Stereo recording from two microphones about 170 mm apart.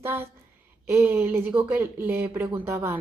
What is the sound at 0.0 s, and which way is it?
Speech, 15° right (ahead or behind).